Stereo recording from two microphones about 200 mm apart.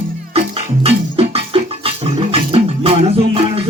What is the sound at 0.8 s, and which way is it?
Music, 30° right (ahead or behind).